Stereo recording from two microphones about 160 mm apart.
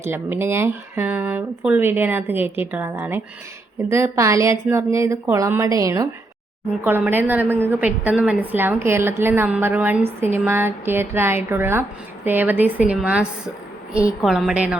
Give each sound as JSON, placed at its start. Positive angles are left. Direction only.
{"t": 0.0, "sound": "a woman's voice", "side_deg": -15}